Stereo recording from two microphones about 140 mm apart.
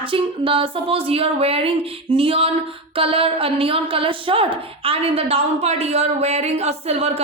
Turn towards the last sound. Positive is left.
turn(degrees=-45)  # may be behind; listen again after turning